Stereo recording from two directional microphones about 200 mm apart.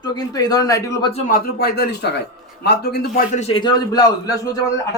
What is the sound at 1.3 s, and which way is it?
Speech, 50° left (ahead or behind).